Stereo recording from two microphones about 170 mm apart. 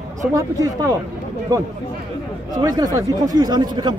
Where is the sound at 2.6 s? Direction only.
20° right (ahead or behind).